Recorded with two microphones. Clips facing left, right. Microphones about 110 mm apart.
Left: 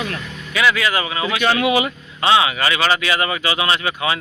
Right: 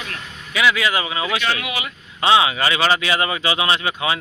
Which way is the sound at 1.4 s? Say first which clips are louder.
Left 7 dB; 30° left (ahead or behind).